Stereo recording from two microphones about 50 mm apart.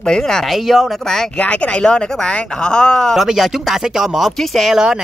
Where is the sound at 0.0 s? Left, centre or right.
Centre.